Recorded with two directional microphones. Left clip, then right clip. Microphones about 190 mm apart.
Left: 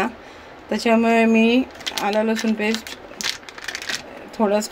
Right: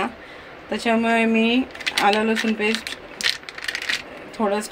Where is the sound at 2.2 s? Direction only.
35° left (ahead or behind).